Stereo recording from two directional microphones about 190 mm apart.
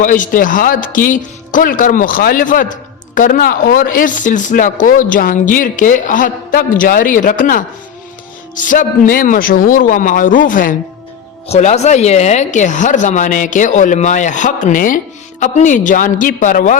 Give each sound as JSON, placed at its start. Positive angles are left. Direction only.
{"t": 0.0, "sound": "speech", "side_deg": 45}
{"t": 11.4, "sound": "speech", "side_deg": 35}